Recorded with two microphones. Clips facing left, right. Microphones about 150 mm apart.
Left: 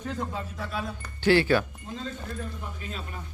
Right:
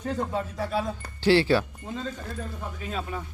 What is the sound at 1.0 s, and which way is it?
Speech, 30° right (ahead or behind).